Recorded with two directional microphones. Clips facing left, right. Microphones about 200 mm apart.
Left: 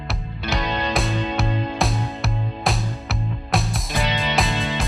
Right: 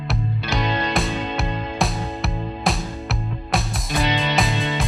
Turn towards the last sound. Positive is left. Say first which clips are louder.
# right 1 dB
turn(degrees=0)  # may be behind; listen again after turning